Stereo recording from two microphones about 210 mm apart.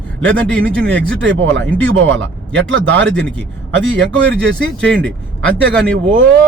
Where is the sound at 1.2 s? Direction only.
60° right (ahead or behind).